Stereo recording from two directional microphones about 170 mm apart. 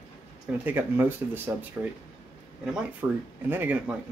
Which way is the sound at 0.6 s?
10° right (ahead or behind).